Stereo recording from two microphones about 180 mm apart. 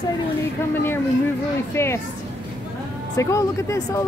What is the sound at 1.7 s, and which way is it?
Speech, 15° left (ahead or behind).